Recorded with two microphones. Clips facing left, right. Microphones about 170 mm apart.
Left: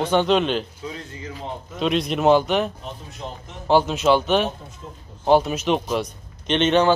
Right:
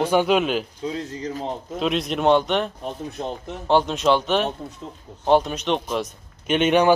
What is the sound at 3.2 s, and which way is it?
Speech, 50° right (ahead or behind).